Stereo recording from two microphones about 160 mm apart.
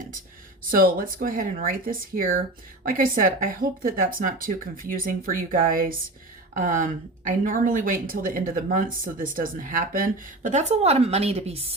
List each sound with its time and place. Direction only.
0.7 s speech: 60° right (ahead or behind); by 11.6 s 40° right (ahead or behind)